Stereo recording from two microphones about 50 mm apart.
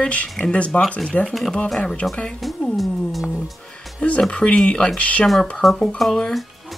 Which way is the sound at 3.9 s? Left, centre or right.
Left.